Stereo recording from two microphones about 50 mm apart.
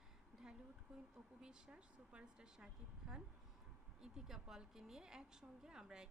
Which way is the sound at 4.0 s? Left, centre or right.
Centre.